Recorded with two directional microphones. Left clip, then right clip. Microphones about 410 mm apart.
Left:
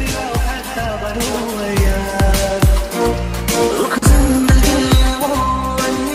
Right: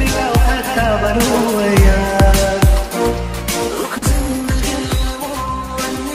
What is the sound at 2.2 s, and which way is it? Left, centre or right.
Music, right.